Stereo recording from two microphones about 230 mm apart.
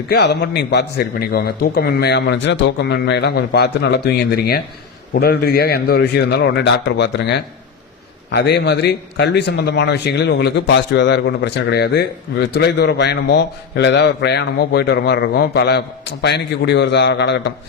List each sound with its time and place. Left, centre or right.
0.1 s a man's voice: left